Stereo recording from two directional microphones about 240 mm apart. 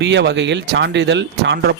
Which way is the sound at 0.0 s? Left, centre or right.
Right.